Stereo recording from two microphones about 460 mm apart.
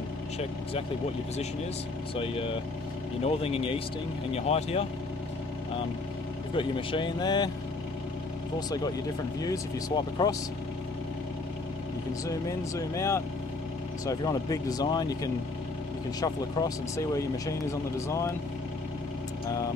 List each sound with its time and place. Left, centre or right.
2.1 s speech: centre
6.5 s speech: centre
8.5 s speech: centre
12.3 s speech: centre
16.2 s speech: centre